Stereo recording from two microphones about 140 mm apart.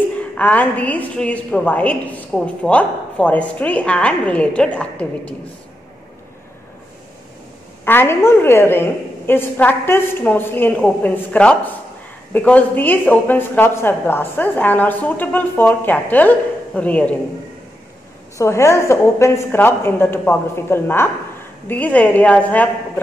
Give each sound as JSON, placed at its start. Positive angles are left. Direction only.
{"t": 0.4, "sound": "a woman's voice", "side_deg": 10}
{"t": 7.8, "sound": "a woman's voice", "side_deg": 15}
{"t": 18.4, "sound": "a woman's voice", "side_deg": 20}